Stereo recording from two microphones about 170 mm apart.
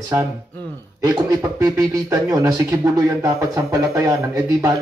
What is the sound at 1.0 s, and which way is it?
A man's voice, 20° right (ahead or behind).